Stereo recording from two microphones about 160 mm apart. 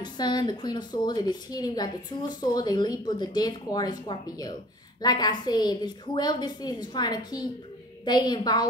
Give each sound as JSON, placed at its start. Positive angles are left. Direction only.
{"t": 0.0, "sound": "a woman's voice", "side_deg": 25}